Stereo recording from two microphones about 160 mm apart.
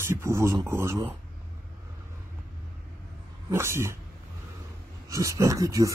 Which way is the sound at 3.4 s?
15° right (ahead or behind).